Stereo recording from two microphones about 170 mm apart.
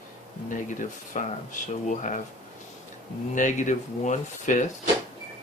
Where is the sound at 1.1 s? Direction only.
45° left (ahead or behind).